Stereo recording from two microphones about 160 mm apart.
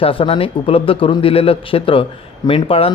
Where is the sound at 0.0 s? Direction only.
35° left (ahead or behind).